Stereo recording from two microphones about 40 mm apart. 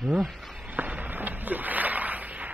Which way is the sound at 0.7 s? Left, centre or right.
Right.